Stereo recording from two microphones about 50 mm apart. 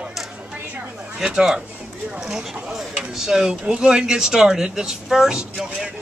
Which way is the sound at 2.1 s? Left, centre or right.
Centre.